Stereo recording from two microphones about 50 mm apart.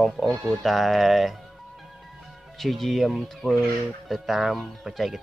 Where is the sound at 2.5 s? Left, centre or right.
Centre.